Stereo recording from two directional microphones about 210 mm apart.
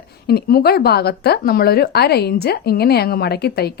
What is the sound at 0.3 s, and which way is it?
Speech, 45° left (ahead or behind).